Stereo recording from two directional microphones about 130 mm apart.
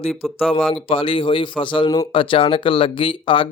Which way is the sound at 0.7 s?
45° left (ahead or behind).